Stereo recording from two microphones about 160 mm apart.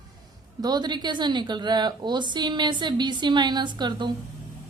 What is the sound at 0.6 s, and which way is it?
Speech, 25° right (ahead or behind).